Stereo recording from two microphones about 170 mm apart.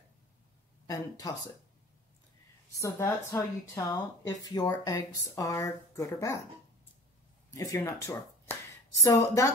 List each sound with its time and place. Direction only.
0.8 s speech: 20° left (ahead or behind)
2.7 s speech: 15° left (ahead or behind)
7.5 s speech: 20° left (ahead or behind)